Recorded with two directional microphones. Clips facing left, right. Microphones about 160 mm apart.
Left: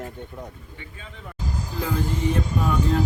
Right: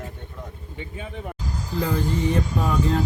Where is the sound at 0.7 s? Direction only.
20° right (ahead or behind).